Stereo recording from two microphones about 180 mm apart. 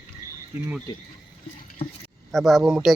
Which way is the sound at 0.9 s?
20° left (ahead or behind).